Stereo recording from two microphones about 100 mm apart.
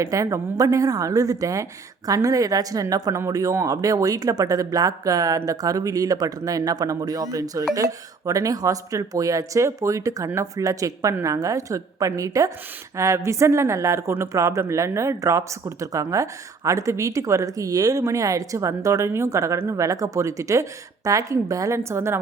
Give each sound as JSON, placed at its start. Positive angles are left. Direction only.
{"t": 0.0, "sound": "speech", "side_deg": -30}